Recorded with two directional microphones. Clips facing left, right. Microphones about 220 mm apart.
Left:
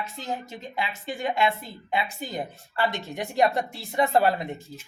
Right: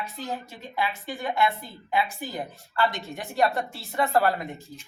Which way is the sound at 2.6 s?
20° left (ahead or behind).